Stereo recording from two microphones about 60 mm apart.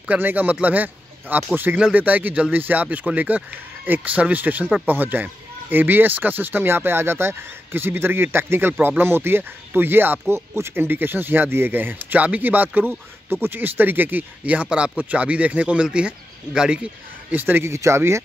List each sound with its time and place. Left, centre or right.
0.1 s speech: right; by 16.9 s centre
17.3 s speech: right
17.6 s speech: right